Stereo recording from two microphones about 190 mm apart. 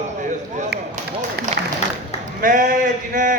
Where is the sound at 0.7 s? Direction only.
55° right (ahead or behind).